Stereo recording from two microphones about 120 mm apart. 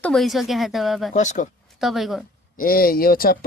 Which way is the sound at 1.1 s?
90° left.